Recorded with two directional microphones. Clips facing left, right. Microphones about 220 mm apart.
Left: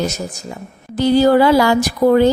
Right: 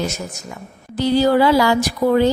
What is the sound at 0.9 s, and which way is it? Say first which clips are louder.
Speech: left 3 dB; 50° left (ahead or behind).